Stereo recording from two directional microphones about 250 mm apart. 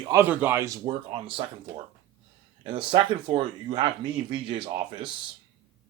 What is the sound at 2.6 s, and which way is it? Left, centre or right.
Speech, centre.